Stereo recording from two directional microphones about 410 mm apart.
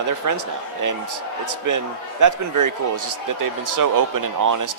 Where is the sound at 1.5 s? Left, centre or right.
Right.